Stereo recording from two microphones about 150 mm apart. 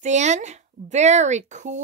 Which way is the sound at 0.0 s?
50° right (ahead or behind).